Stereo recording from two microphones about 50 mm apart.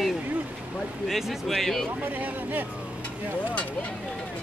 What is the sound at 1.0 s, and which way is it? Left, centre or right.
Speech, centre.